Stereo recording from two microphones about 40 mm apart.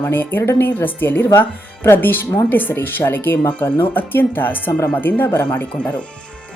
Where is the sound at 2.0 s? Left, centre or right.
Left.